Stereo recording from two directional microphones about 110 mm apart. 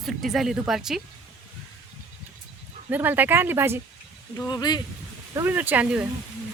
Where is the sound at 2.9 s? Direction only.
15° right (ahead or behind).